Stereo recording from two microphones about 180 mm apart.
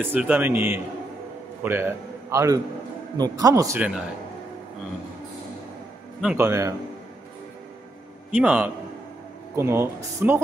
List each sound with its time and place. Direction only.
0.0 s a man's voice: 10° right (ahead or behind)
6.2 s speech: 15° right (ahead or behind)
8.3 s speech: 5° right (ahead or behind)